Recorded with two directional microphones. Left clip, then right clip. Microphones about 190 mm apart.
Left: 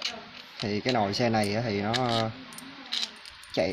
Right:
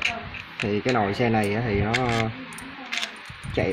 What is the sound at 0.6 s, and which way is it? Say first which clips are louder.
Speech: right 4 dB; 10° left (ahead or behind).